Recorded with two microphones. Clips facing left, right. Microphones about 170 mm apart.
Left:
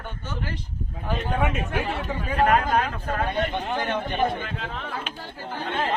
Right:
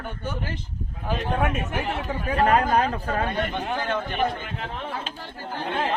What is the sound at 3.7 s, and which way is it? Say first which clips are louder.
Speech: left 1 dB; 20° left (ahead or behind).